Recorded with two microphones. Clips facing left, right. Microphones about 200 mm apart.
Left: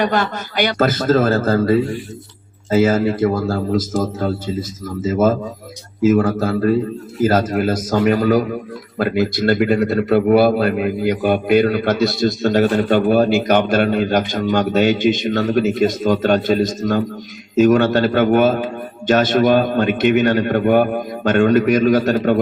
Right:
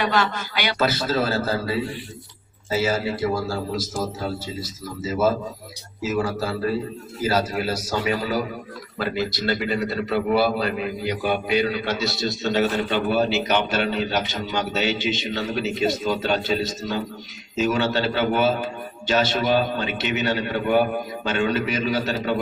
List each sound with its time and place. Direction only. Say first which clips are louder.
0.0 s a man's voice: left 4 dB; 50° left (ahead or behind)